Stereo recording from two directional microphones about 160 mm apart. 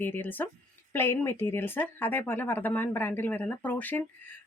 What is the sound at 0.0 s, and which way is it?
Speech, 15° left (ahead or behind).